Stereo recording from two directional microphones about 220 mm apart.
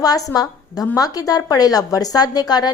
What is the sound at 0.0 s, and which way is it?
A woman's voice, 15° left (ahead or behind).